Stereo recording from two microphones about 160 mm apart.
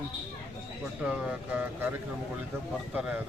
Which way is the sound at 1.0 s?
5° right (ahead or behind).